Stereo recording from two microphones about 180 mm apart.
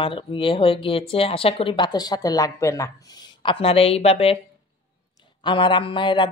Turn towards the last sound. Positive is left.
turn(degrees=25)  # may be behind; listen again after turning